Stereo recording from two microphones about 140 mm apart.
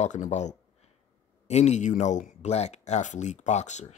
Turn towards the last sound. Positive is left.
turn(degrees=55)  # may be behind; listen again after turning